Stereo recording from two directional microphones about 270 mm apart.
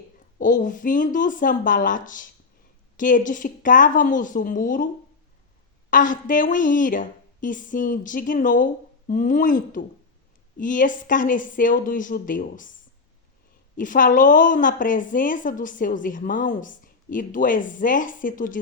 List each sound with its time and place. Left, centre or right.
0.3 s a woman's voice: left
5.9 s a woman's voice: left
13.7 s a woman's voice: left